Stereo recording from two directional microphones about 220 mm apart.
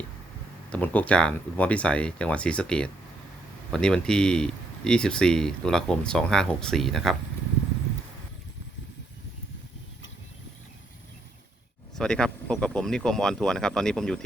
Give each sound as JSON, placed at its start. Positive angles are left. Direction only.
{"t": 0.7, "sound": "speech", "side_deg": 5}
{"t": 11.9, "sound": "speech", "side_deg": 5}